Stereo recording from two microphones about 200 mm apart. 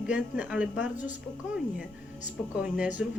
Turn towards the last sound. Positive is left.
turn(degrees=-5)  # may be behind; listen again after turning